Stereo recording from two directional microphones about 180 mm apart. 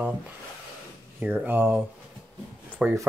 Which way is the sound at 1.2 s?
10° right (ahead or behind).